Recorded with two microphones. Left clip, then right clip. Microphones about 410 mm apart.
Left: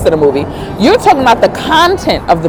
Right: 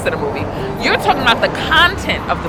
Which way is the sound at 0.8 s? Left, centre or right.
Left.